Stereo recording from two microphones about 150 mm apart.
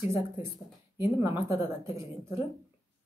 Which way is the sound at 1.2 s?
20° right (ahead or behind).